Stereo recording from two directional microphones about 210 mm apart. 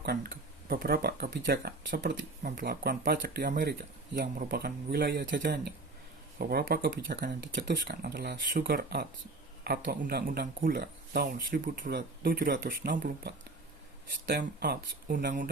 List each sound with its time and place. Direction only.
0.0 s speech: 50° right (ahead or behind)